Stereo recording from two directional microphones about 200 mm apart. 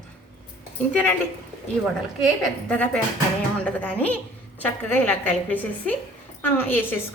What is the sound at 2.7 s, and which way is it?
A woman's voice, 5° left (ahead or behind).